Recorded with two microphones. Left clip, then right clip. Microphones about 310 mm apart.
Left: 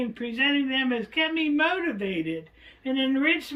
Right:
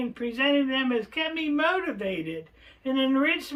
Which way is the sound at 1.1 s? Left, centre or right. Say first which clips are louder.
Left 3 dB; centre.